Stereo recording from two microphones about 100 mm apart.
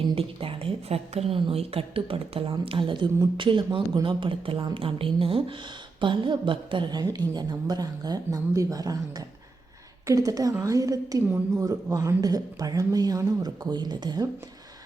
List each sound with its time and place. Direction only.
0.2 s a woman's voice: 65° right (ahead or behind); by 1.4 s 90° right
1.4 s speech: 65° right (ahead or behind)
7.0 s a woman's voice: 40° right (ahead or behind)